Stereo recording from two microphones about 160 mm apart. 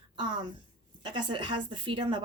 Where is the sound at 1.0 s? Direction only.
30° right (ahead or behind).